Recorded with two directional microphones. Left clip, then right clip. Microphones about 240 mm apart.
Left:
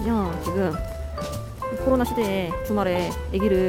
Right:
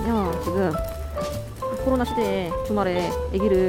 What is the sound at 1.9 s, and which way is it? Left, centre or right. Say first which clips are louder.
Speech: left 1 dB; centre.